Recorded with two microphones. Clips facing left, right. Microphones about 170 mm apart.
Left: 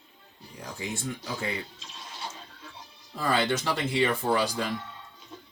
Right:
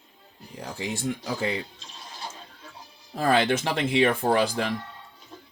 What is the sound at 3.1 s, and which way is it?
Speech, 60° right (ahead or behind).